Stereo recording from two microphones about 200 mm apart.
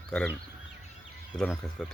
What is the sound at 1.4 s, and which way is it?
Speech, 5° left (ahead or behind).